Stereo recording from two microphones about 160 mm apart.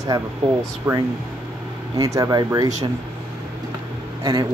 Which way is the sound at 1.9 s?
20° right (ahead or behind).